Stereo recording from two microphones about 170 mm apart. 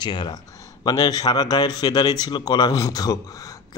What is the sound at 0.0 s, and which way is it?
A man's voice, 25° left (ahead or behind).